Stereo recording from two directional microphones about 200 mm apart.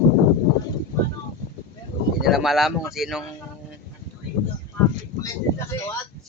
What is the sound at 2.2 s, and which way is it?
Speech, centre (ahead or behind).